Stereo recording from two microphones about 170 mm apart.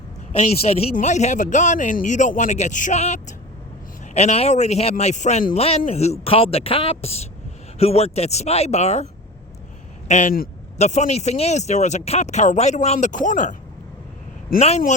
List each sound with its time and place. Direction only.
0.3 s speech: 35° left (ahead or behind)
5.5 s speech: 35° left (ahead or behind)
10.1 s speech: 45° left (ahead or behind)